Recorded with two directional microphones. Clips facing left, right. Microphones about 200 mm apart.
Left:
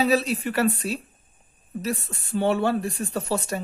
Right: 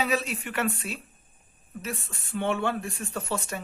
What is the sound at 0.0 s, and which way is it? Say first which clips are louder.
Speech: left 6 dB; 35° left (ahead or behind).